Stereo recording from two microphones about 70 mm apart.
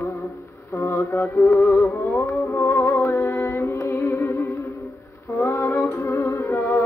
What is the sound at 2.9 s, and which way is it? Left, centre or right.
Music, left.